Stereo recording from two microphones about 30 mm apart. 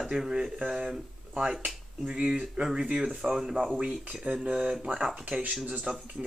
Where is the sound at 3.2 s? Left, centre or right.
Centre.